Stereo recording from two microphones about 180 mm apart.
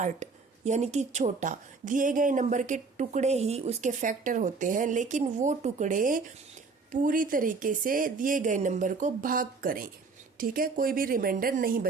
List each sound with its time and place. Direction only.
0.0 s speech: 40° right (ahead or behind)